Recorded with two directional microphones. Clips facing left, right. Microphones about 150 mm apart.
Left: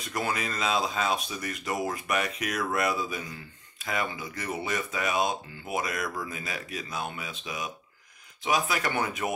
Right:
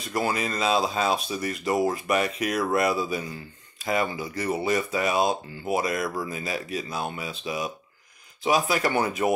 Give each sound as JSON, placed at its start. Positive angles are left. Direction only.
{"t": 0.1, "sound": "speech", "side_deg": -35}